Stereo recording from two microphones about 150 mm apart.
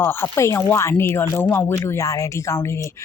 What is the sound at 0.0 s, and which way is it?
Speech, 15° left (ahead or behind).